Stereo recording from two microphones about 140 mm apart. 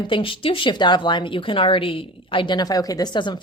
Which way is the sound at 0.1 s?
40° left (ahead or behind).